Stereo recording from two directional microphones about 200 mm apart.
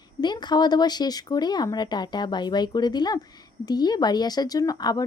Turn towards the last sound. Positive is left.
turn(degrees=20)  # may be behind; listen again after turning